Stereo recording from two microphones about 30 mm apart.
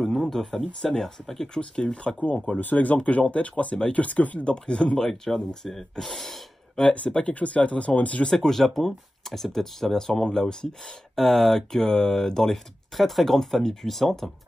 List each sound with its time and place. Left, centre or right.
0.0 s speech: centre; by 1.1 s left
1.2 s speech: centre
2.1 s speech: left
2.6 s speech: left
2.9 s speech: left
4.5 s speech: left
4.9 s speech: centre
5.7 s speech: centre
6.8 s speech: left
7.2 s speech: left
8.3 s speech: centre
11.1 s speech: centre
12.9 s speech: centre